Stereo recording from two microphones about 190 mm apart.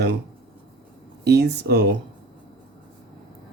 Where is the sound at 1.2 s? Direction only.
60° right (ahead or behind).